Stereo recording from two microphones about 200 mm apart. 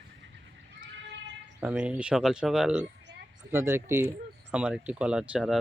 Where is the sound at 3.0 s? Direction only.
60° right (ahead or behind).